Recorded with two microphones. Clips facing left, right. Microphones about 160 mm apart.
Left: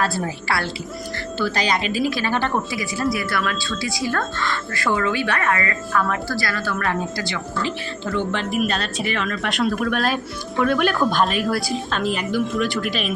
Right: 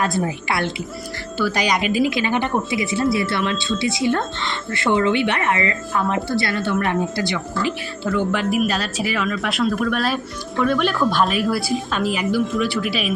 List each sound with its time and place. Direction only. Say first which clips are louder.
0.0 s speech: right 2 dB; 20° right (ahead or behind)